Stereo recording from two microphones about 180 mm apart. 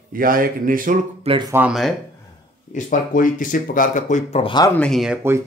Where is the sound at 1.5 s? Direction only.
5° right (ahead or behind).